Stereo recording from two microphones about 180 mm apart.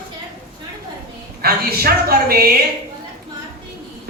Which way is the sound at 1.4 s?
60° right (ahead or behind).